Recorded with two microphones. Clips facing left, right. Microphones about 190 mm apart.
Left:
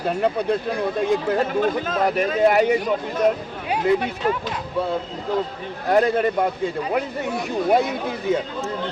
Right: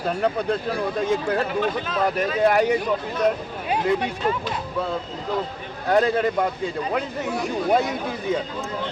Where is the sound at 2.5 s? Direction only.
5° left (ahead or behind).